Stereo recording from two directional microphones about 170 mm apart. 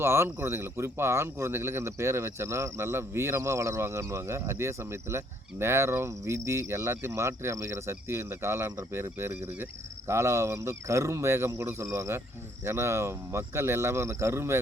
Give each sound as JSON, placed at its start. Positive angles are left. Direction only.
{"t": 0.0, "sound": "speech", "side_deg": -15}